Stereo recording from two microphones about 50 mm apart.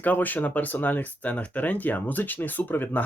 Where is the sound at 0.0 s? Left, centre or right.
Left.